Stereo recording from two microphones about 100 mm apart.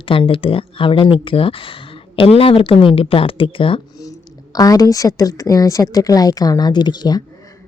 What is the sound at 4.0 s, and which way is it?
A woman's voice, 35° left (ahead or behind).